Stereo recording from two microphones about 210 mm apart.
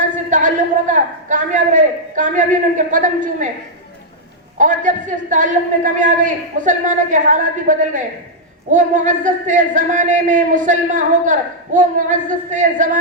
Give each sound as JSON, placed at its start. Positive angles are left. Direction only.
{"t": 0.3, "sound": "speech", "side_deg": -35}
{"t": 4.5, "sound": "speech", "side_deg": -35}